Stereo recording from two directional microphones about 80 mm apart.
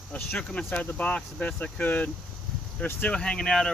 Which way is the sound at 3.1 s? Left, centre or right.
Centre.